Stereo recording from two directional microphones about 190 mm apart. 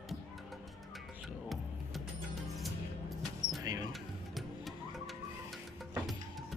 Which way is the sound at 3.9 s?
Centre (ahead or behind).